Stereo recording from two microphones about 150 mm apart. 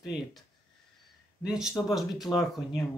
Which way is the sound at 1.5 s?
5° right (ahead or behind).